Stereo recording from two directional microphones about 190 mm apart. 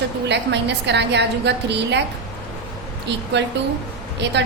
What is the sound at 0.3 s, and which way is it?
A woman's voice, 65° right (ahead or behind).